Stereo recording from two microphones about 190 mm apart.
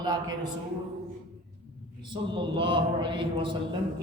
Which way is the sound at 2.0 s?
25° right (ahead or behind).